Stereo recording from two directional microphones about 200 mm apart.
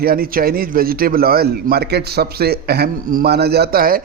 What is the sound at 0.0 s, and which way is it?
A man's voice, 45° right (ahead or behind).